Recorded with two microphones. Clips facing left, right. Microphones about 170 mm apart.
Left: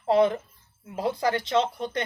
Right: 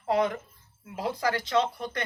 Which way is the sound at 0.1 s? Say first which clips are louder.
Left 5 dB; 30° left (ahead or behind).